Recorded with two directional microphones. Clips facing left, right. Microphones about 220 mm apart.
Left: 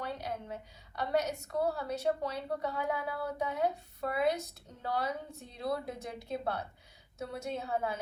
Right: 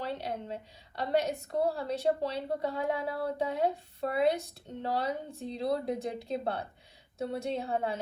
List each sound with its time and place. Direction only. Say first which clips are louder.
0.0 s a woman's voice: right 3 dB; 30° right (ahead or behind)